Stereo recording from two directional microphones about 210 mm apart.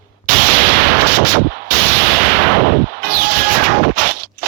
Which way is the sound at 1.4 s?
45° right (ahead or behind).